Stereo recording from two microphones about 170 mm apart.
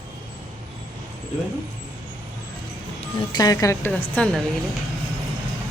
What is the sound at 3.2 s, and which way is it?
Speech, 25° left (ahead or behind).